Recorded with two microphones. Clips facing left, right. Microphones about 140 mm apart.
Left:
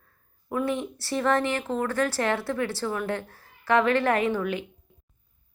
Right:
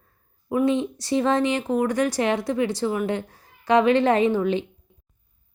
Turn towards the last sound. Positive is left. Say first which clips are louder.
# right 5 dB
turn(degrees=-25)  # may be behind; listen again after turning